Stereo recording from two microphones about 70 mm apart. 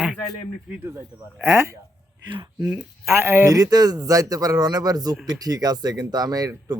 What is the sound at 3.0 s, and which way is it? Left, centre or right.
Speech, right.